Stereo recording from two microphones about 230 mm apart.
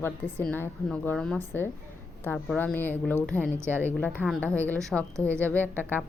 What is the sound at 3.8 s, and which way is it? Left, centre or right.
A woman's voice, centre.